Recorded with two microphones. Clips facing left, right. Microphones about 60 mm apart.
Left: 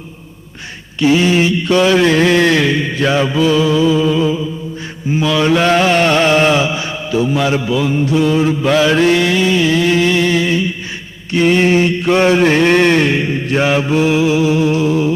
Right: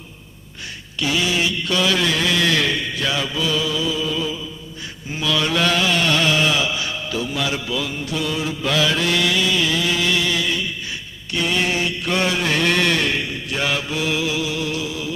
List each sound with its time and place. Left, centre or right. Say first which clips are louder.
0.9 s mantra: left 9 dB; left
2.6 s mantra: left 7 dB; left
2.8 s mantra: left 9 dB; left
6.6 s mantra: left 6 dB; left